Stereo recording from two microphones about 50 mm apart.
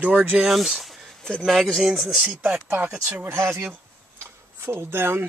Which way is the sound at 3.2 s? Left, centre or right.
Right.